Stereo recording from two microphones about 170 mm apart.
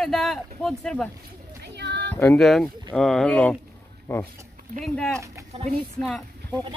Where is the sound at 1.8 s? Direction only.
90° right.